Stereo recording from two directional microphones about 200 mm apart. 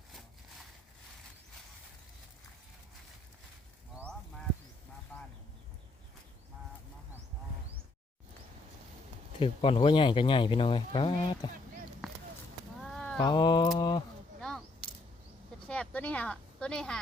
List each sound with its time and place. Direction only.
5.1 s a sound: 10° left (ahead or behind)
9.4 s speech: 25° left (ahead or behind)
12.0 s a sound: centre (ahead or behind)
13.1 s speech: 20° left (ahead or behind)
14.4 s coin: centre (ahead or behind)
15.6 s speech: 5° left (ahead or behind)